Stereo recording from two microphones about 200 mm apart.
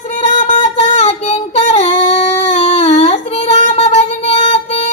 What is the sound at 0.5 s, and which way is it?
Female singing, 35° left (ahead or behind).